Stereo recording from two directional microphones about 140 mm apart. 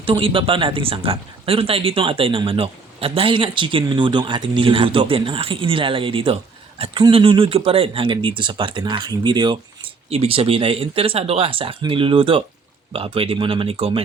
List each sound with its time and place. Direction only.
0.0 s speech: 40° right (ahead or behind)
10.1 s speech: 45° right (ahead or behind)